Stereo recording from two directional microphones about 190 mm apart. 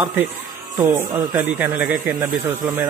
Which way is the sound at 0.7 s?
10° right (ahead or behind).